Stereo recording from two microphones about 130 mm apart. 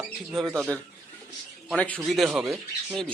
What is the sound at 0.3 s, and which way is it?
Speech, centre (ahead or behind).